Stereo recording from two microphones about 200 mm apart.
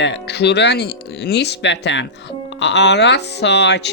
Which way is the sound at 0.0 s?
60° left (ahead or behind).